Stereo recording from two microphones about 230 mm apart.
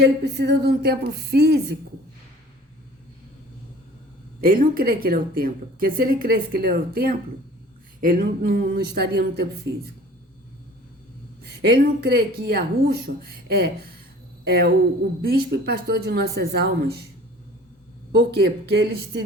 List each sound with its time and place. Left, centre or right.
0.2 s speech: right
4.4 s a woman's voice: right
11.4 s a woman's voice: right
18.1 s speech: right